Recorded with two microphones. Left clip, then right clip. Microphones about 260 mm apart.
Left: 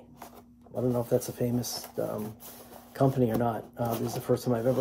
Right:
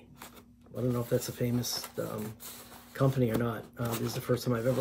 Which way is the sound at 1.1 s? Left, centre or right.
Centre.